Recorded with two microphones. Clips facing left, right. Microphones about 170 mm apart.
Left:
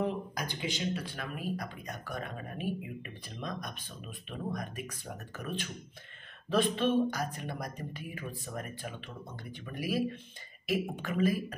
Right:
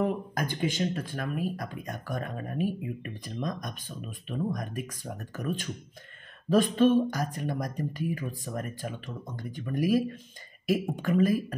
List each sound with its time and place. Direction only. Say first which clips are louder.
0.0 s speech: right 5 dB; 50° right (ahead or behind)